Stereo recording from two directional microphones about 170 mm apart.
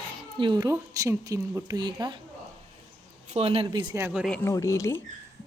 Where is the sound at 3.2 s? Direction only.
40° right (ahead or behind).